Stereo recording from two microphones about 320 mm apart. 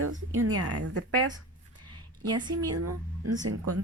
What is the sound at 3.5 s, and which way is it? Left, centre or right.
Speech, right.